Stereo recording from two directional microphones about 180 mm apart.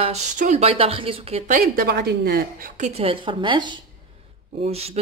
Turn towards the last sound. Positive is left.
turn(degrees=-35)  # may be behind; listen again after turning